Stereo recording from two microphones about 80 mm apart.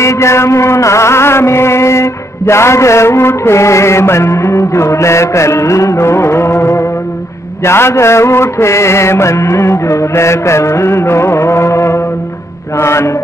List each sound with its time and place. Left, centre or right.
0.0 s mantra: left